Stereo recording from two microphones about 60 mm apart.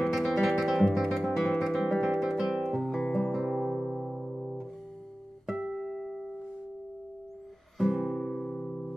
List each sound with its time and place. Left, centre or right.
0.0 s music: centre
5.9 s music: centre
7.7 s music: centre
8.6 s music: centre